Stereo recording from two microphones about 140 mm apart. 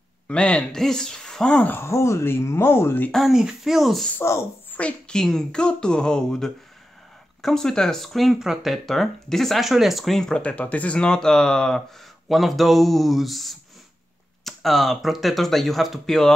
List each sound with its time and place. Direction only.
0.3 s speech: 10° left (ahead or behind)
3.1 s speech: centre (ahead or behind)
4.2 s speech: 20° left (ahead or behind)
4.7 s speech: 5° left (ahead or behind)